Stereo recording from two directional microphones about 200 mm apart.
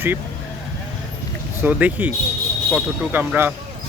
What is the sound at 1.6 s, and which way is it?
Speech, 10° right (ahead or behind).